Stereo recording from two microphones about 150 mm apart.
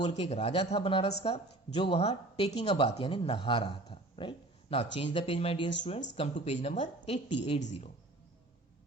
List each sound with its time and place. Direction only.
0.1 s speech: 45° left (ahead or behind)